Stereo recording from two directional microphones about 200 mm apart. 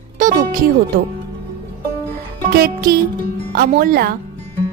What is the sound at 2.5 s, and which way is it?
Speech, 50° right (ahead or behind).